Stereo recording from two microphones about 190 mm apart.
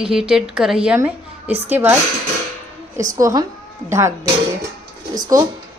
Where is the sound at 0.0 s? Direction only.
5° right (ahead or behind).